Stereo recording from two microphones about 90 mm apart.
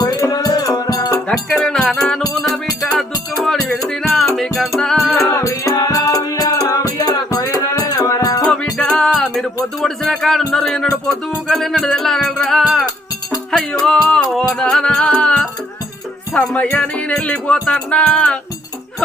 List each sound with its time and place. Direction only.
0.0 s music: 45° left (ahead or behind)
1.3 s music: 10° left (ahead or behind)
5.3 s music: 35° left (ahead or behind)
8.8 s music: 5° left (ahead or behind)
13.8 s music: 5° left (ahead or behind)